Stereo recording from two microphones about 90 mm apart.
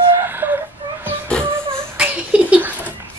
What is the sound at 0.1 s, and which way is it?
Whimper, 25° right (ahead or behind).